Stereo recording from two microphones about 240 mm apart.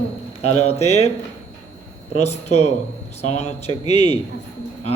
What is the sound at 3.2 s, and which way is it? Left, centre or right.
Speech, left.